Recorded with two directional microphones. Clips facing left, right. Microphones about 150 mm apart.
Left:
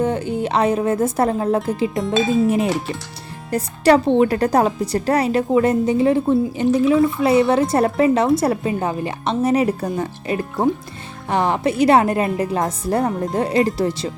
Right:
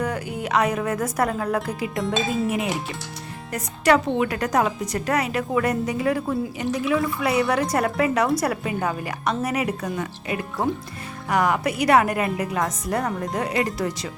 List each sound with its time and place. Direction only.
0.0 s a woman's voice: 25° left (ahead or behind)